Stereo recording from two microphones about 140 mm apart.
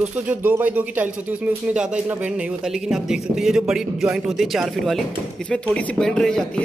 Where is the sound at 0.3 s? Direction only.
10° right (ahead or behind).